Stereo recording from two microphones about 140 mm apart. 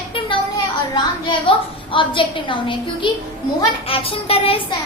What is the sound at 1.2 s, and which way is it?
A child's voice, 35° left (ahead or behind).